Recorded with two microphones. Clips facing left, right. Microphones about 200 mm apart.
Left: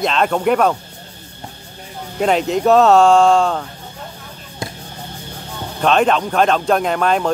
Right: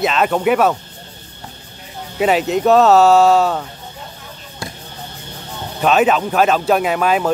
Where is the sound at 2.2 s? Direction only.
5° right (ahead or behind).